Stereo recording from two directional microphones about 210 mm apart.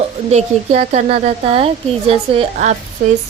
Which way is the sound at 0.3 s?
30° right (ahead or behind).